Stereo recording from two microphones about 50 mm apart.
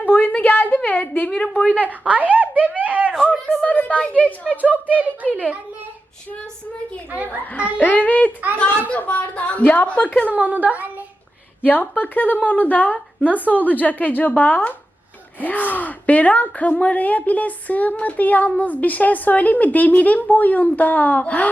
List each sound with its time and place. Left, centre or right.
0.0 s a sound: left
0.3 s a woman's voice: left
2.0 s speech: right
3.3 s a woman's voice: centre; by 4.6 s left
4.6 s speech: right
7.5 s a woman's voice: left
10.2 s speech: right
11.6 s speech: left